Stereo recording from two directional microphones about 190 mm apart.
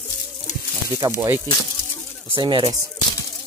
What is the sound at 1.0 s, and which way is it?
Speech, 15° right (ahead or behind).